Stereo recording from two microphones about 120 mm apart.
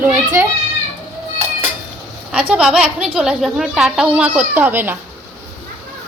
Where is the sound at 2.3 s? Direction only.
10° right (ahead or behind).